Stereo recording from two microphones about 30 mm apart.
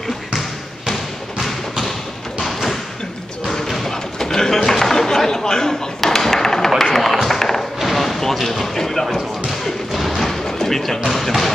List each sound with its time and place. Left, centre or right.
1.4 s bouncing: centre
2.4 s a sound: centre
6.8 s music: centre
7.2 s a sound: centre
8.5 s speech: centre
9.9 s slam: centre
11.1 s speech: centre